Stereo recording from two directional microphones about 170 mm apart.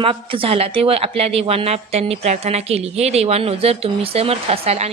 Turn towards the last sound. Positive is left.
turn(degrees=-35)  # may be behind; listen again after turning